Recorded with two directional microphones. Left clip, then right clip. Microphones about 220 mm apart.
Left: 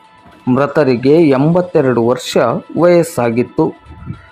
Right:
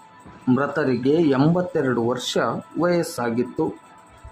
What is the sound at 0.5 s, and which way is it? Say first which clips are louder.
Speech: left 10 dB; 20° left (ahead or behind).